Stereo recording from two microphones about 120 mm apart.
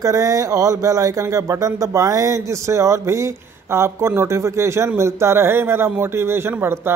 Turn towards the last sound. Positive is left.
turn(degrees=-20)  # may be behind; listen again after turning